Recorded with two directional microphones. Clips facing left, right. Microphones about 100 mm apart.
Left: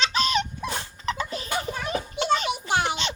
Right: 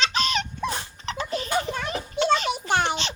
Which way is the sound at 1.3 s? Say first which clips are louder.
Right 3 dB; 40° right (ahead or behind).